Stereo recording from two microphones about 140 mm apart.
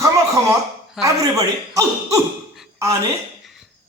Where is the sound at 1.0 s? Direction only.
25° right (ahead or behind).